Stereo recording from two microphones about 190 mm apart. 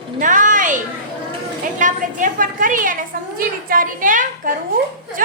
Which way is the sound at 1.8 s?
45° right (ahead or behind).